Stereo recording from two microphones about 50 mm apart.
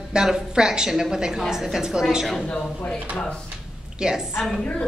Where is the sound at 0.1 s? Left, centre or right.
Centre.